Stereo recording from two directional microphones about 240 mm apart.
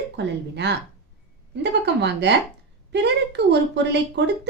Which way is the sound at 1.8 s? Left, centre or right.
Right.